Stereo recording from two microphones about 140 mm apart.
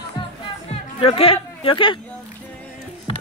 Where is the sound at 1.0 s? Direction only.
40° left (ahead or behind).